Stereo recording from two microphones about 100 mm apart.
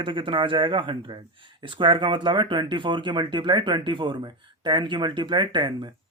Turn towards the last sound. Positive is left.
turn(degrees=-50)  # may be behind; listen again after turning